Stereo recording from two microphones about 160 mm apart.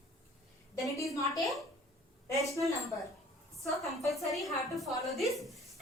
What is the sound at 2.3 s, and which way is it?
Speech, 20° left (ahead or behind).